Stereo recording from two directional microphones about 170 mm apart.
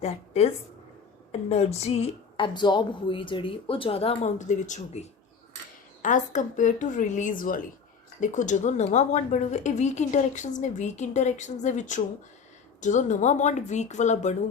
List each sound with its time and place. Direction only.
1.3 s a woman's voice: 35° left (ahead or behind)